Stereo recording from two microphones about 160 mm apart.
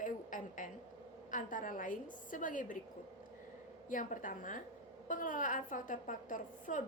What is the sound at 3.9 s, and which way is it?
A woman's voice, 55° left (ahead or behind).